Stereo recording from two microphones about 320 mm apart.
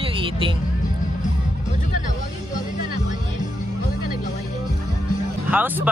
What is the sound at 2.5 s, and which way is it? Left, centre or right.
Music, left.